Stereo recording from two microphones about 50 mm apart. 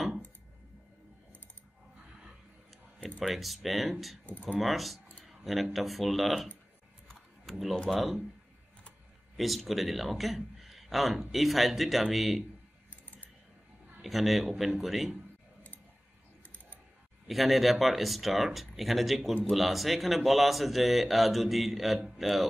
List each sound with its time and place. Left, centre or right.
3.2 s a man's voice: centre
4.3 s speech: left
4.6 s a man's voice: centre
7.9 s a man's voice: centre
9.4 s a man's voice: centre
14.0 s a man's voice: centre
17.3 s a man's voice: centre